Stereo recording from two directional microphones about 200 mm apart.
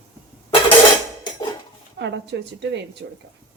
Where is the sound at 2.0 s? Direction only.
60° right (ahead or behind).